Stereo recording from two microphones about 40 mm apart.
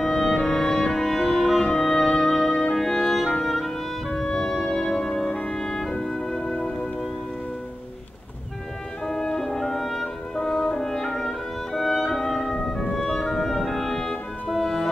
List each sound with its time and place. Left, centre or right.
0.0 s music: centre
9.0 s music: centre